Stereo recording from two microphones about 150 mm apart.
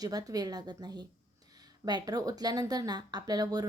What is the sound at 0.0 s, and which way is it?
Speech, 25° right (ahead or behind).